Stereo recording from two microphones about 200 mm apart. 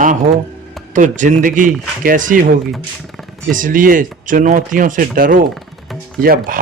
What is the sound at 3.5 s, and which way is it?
Speech, 40° right (ahead or behind).